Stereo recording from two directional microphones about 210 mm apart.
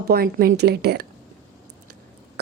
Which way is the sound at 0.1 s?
45° right (ahead or behind).